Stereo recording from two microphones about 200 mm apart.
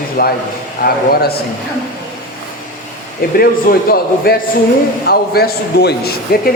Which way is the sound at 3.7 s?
45° left (ahead or behind).